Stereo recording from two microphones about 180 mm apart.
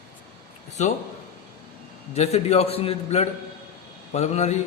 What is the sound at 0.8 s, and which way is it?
Speech, 40° left (ahead or behind).